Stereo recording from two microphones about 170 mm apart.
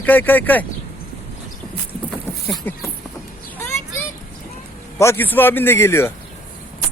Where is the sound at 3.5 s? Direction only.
15° left (ahead or behind).